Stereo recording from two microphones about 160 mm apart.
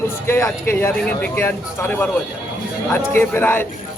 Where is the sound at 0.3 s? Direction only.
15° left (ahead or behind).